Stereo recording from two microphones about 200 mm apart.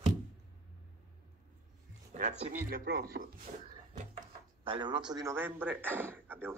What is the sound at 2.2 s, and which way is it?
Speech, 35° right (ahead or behind).